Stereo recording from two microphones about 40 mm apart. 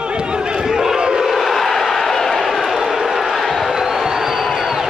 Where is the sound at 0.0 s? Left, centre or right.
Right.